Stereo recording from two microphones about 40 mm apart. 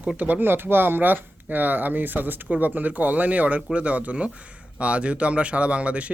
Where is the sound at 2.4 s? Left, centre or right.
Right.